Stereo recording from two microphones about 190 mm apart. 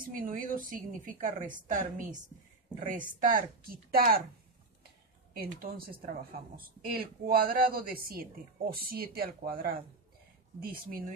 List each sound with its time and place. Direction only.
0.0 s a woman's voice: 50° right (ahead or behind)
5.4 s a woman's voice: 50° right (ahead or behind)